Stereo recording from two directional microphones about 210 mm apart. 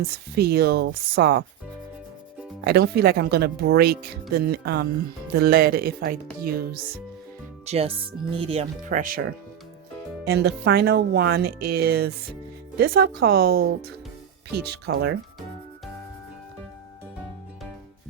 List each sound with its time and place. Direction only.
0.3 s speech: 50° right (ahead or behind)
2.6 s speech: 50° right (ahead or behind)
7.6 s speech: 30° right (ahead or behind)
10.2 s speech: 50° right (ahead or behind)